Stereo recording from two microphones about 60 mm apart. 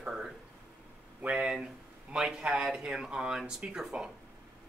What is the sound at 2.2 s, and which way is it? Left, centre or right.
Speech, centre.